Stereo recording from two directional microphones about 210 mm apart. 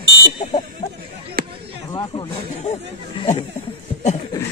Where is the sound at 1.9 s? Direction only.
20° left (ahead or behind).